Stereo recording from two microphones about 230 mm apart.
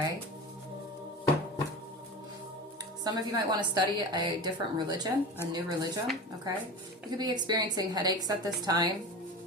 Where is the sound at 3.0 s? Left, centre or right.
Centre.